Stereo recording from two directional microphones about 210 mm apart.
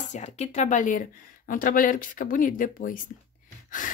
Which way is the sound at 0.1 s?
35° left (ahead or behind).